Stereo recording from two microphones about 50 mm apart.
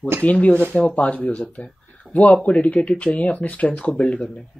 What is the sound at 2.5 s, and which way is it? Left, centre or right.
Speech, left.